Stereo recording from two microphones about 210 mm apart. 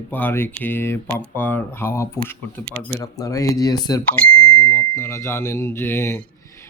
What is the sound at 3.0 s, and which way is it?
Speech, 15° left (ahead or behind).